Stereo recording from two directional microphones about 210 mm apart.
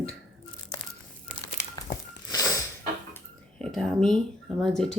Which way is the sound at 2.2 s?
15° left (ahead or behind).